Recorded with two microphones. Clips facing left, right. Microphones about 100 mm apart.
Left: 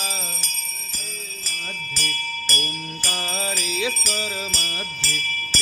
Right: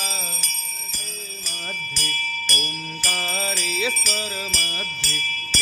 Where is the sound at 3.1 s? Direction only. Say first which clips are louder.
Even; 15° left (ahead or behind).